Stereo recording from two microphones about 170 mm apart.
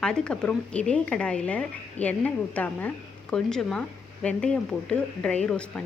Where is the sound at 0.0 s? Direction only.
5° left (ahead or behind).